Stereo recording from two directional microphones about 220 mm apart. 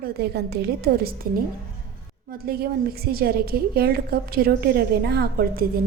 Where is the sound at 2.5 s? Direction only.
45° right (ahead or behind).